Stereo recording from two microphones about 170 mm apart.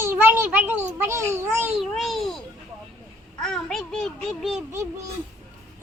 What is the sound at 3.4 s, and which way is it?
A child's voice, 5° left (ahead or behind).